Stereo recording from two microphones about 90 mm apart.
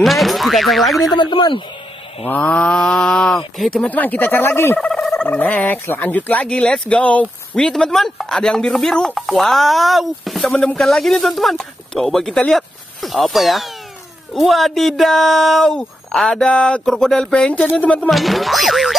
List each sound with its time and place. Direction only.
0.0 s speech: centre (ahead or behind)
1.1 s speech: 60° left (ahead or behind)
2.2 s turkey: 20° left (ahead or behind)
3.5 s speech: 5° left (ahead or behind)
3.9 s speech: 20° left (ahead or behind)
5.2 s turkey: 20° left (ahead or behind); by 10.5 s centre (ahead or behind)
10.5 s speech: 5° left (ahead or behind)
14.3 s turkey: centre (ahead or behind); by 18.1 s 15° left (ahead or behind)
18.1 s speech: centre (ahead or behind)